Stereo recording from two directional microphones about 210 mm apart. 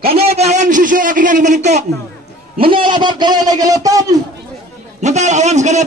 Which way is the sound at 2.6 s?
25° right (ahead or behind).